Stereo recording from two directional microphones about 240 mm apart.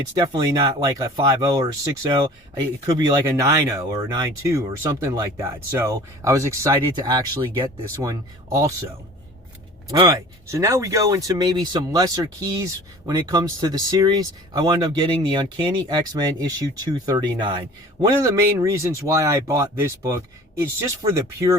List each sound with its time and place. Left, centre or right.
0.2 s speech: centre
10.0 s speech: centre